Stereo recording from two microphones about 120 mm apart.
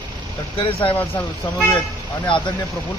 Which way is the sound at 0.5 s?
50° left (ahead or behind).